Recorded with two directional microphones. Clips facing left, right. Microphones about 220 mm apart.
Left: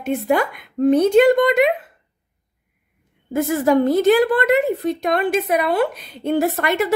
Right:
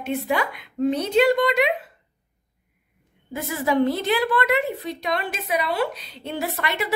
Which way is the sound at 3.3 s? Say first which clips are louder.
Left 8 dB; 50° left (ahead or behind).